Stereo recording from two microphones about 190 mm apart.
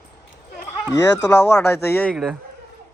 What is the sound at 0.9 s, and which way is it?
Speech, 15° left (ahead or behind).